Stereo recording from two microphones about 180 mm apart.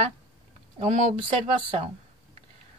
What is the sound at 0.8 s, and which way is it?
Speech, 45° right (ahead or behind).